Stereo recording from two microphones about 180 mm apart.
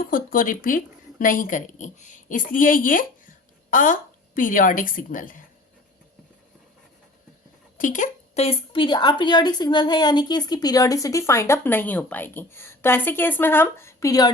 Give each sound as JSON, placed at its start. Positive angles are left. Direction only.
{"t": 0.0, "sound": "a woman's voice", "side_deg": 50}
{"t": 7.8, "sound": "speech", "side_deg": 45}